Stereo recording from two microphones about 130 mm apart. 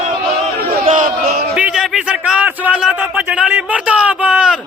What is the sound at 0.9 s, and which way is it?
Crowd, 80° right.